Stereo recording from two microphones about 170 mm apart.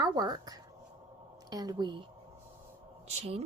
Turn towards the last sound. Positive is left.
turn(degrees=-40)  # may be behind; listen again after turning